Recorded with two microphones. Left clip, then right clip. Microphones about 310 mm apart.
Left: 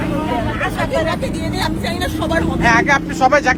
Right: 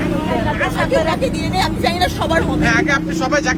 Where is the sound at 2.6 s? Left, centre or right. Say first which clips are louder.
Left 7 dB; centre.